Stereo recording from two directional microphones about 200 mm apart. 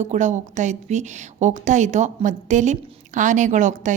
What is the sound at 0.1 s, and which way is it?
A woman's voice, 35° right (ahead or behind).